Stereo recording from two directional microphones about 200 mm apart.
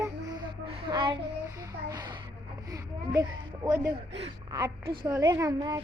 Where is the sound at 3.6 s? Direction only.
15° right (ahead or behind).